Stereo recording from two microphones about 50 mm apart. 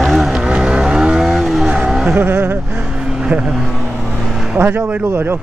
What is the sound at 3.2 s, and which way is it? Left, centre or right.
Speech, centre.